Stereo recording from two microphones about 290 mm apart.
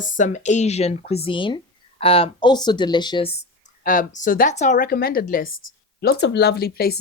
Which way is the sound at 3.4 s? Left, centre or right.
Left.